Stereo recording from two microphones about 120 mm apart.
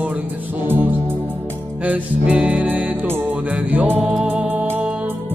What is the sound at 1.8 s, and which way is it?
Music, 10° right (ahead or behind).